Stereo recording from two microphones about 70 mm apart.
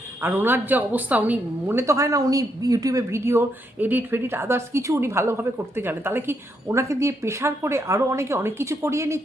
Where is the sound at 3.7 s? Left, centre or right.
Right.